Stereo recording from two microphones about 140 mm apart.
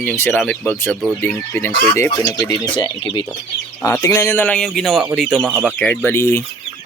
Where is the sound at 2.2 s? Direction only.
30° left (ahead or behind).